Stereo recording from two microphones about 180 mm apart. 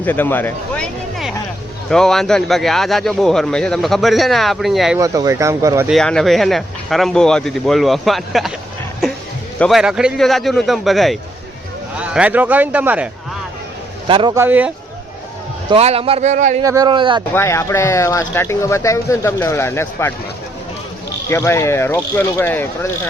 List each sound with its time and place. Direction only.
0.0 s speech: 10° left (ahead or behind)
1.9 s a man's voice: 5° left (ahead or behind)
4.9 s a man's voice: 20° right (ahead or behind)
5.9 s a man's voice: 5° left (ahead or behind)
9.6 s a man's voice: centre (ahead or behind)
14.1 s speech: 30° right (ahead or behind)
14.3 s a man's voice: 10° right (ahead or behind)
15.7 s a man's voice: 35° right (ahead or behind)
16.6 s speech: 20° right (ahead or behind)
17.3 s speech: 15° left (ahead or behind)
21.2 s speech: 15° left (ahead or behind)